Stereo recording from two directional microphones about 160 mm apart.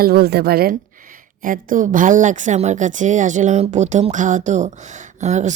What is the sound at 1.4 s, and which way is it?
Speech, 60° right (ahead or behind).